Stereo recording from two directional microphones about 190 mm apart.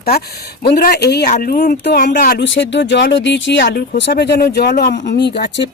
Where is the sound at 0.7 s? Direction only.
55° left (ahead or behind).